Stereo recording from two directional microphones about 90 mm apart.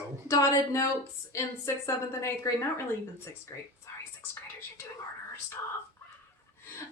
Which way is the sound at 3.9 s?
35° left (ahead or behind).